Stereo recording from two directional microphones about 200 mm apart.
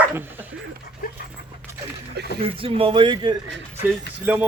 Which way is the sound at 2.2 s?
55° right (ahead or behind).